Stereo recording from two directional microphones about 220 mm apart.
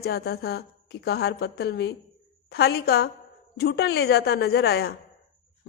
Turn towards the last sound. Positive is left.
turn(degrees=45)  # may be behind; listen again after turning